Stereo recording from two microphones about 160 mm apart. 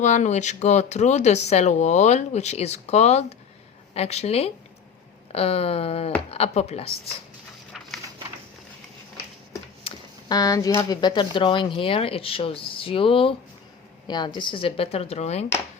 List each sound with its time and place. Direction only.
0.0 s speech: 50° left (ahead or behind)
9.8 s speech: 25° left (ahead or behind); by 15.4 s 40° left (ahead or behind)